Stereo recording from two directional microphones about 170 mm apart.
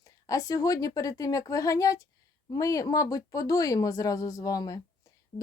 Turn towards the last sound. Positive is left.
turn(degrees=20)  # may be behind; listen again after turning